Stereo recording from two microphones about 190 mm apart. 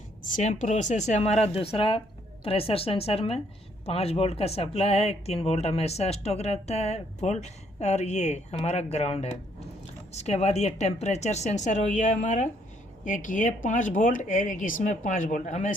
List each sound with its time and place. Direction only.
0.2 s speech: 45° left (ahead or behind)